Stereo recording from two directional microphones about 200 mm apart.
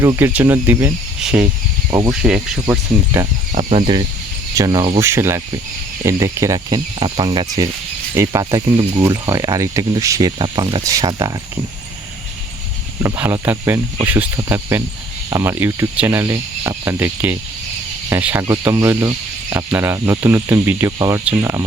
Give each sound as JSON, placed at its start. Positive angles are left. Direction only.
{"t": 0.0, "sound": "speech", "side_deg": -10}
{"t": 1.9, "sound": "speech", "side_deg": -15}
{"t": 2.2, "sound": "speech", "side_deg": -5}
{"t": 3.6, "sound": "speech", "side_deg": -30}
{"t": 13.0, "sound": "speech", "side_deg": -10}